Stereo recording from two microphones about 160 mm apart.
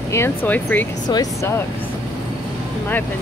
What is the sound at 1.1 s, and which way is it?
Speech, 20° left (ahead or behind).